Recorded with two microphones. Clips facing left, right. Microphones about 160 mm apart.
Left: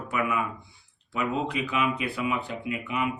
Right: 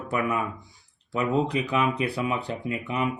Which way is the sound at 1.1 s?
35° right (ahead or behind).